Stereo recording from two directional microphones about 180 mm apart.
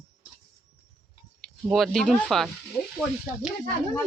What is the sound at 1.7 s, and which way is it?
Speech, centre (ahead or behind).